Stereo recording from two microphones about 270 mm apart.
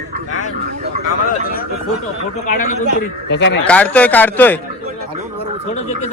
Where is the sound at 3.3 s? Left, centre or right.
Left.